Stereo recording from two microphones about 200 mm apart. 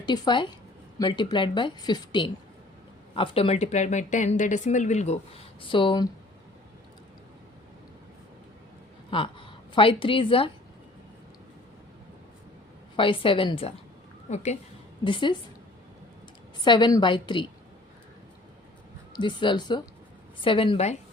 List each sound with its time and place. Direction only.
0.0 s a woman's voice: 20° left (ahead or behind)
9.0 s a woman's voice: 25° left (ahead or behind)
13.0 s a woman's voice: 25° left (ahead or behind)
15.0 s a woman's voice: 25° left (ahead or behind)
16.6 s a woman's voice: 20° left (ahead or behind)
19.1 s a woman's voice: 25° left (ahead or behind)